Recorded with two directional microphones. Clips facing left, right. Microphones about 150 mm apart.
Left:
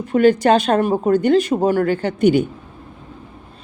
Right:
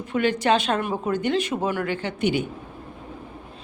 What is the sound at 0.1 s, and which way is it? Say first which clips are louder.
A woman's voice: left 8 dB; 45° left (ahead or behind).